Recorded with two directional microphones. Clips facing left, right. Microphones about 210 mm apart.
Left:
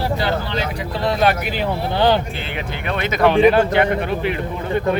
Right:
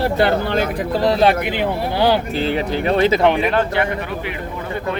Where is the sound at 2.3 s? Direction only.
35° right (ahead or behind).